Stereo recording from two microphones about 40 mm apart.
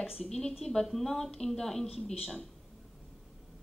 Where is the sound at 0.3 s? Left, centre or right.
Centre.